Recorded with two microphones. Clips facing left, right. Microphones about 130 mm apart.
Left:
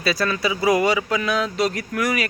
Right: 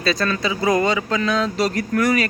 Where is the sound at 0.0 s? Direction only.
5° left (ahead or behind).